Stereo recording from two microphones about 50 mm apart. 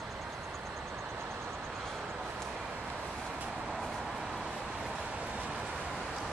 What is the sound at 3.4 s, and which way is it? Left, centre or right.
Vehicle, right.